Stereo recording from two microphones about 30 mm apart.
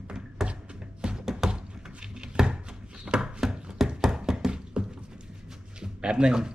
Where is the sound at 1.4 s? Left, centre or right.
Right.